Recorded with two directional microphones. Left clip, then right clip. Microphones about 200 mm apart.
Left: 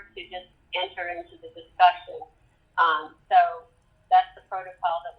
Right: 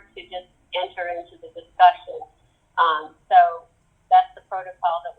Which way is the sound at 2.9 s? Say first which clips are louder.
Right 4 dB; 15° right (ahead or behind).